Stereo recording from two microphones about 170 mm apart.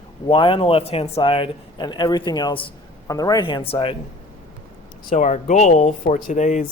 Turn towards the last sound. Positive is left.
turn(degrees=45)  # may be behind; listen again after turning